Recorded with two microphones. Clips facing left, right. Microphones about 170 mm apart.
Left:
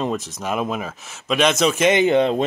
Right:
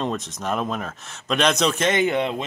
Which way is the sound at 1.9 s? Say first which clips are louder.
Left 5 dB; 25° left (ahead or behind).